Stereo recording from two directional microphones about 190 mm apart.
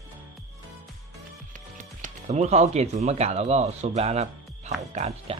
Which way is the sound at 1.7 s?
40° right (ahead or behind).